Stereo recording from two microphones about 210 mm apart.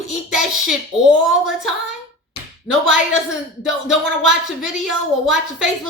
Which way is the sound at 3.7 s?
Centre (ahead or behind).